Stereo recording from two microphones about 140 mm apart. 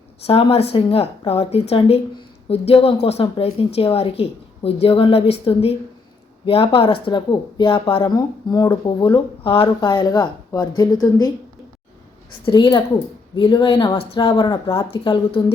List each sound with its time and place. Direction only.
0.3 s a woman's voice: 40° left (ahead or behind); by 11.3 s 25° left (ahead or behind)
12.5 s speech: 30° left (ahead or behind)